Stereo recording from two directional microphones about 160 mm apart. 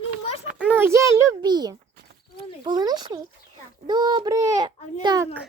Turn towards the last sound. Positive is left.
turn(degrees=-25)  # may be behind; listen again after turning